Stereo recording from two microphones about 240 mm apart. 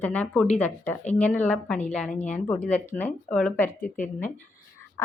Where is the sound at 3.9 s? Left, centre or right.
Left.